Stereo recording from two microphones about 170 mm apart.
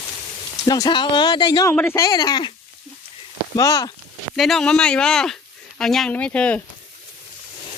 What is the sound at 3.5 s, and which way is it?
Speech, 20° left (ahead or behind).